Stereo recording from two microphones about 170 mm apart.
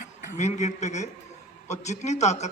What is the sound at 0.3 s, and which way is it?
A man's voice, 40° left (ahead or behind).